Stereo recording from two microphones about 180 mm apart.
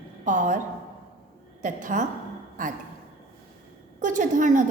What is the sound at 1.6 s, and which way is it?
Speech, 45° right (ahead or behind).